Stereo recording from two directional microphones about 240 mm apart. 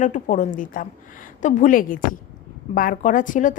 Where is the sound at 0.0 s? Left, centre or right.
Left.